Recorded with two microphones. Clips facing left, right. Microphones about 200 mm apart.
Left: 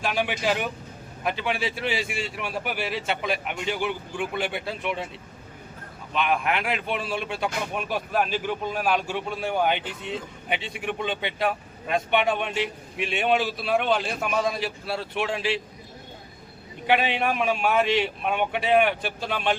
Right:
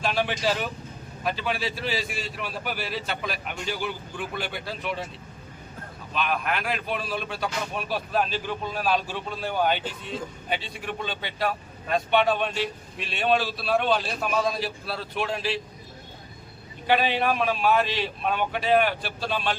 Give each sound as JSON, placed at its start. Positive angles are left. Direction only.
{"t": 0.0, "sound": "speech", "side_deg": 15}
{"t": 6.2, "sound": "speech", "side_deg": 20}
{"t": 16.8, "sound": "speech", "side_deg": 15}